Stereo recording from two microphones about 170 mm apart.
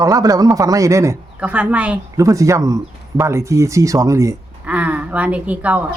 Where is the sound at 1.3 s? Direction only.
5° right (ahead or behind).